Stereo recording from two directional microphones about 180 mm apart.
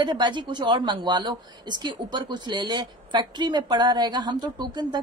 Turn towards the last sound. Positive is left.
turn(degrees=-25)  # may be behind; listen again after turning